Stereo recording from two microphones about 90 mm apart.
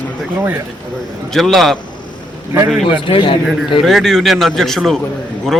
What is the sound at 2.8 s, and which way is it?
Speech, 80° left.